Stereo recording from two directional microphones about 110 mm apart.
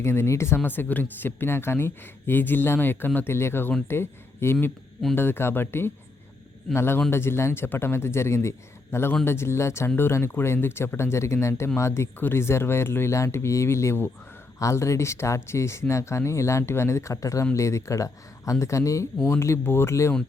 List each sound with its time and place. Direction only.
0.0 s speech: 25° left (ahead or behind)